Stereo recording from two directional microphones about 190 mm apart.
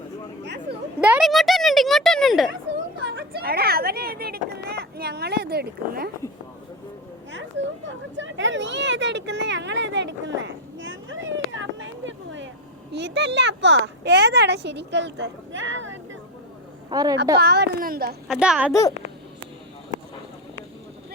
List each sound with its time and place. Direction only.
0.4 s a sound: 65° right (ahead or behind)
1.0 s a sound: 5° right (ahead or behind)
3.4 s a sound: 55° right (ahead or behind)
7.9 s speech: 75° right (ahead or behind)
12.9 s speech: 65° right (ahead or behind)
16.9 s a woman's voice: 20° right (ahead or behind)
17.4 s speech: 60° right (ahead or behind)
18.3 s a child's voice: 5° right (ahead or behind)
18.7 s a child's voice: 15° left (ahead or behind)